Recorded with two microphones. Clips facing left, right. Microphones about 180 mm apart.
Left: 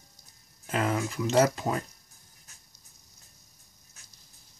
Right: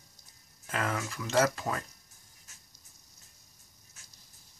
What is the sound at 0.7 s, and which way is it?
Speech, 20° left (ahead or behind).